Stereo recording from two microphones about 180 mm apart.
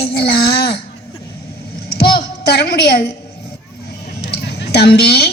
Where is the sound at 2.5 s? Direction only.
65° left (ahead or behind).